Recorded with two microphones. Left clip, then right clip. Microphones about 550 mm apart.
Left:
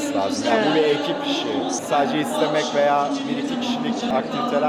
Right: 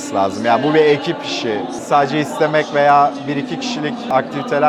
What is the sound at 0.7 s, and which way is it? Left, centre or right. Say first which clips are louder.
A man's voice: right 6 dB; right.